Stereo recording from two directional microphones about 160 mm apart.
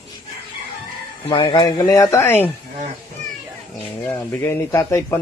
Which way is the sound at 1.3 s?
30° left (ahead or behind).